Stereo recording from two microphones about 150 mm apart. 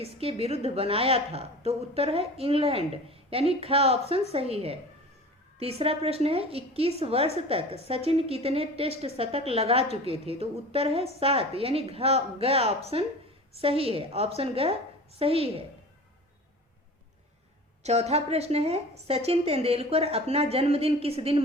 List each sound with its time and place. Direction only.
0.0 s a woman's voice: 40° right (ahead or behind)
17.8 s a woman's voice: 45° right (ahead or behind)